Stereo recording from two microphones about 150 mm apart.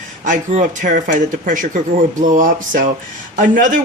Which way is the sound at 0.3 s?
60° right (ahead or behind).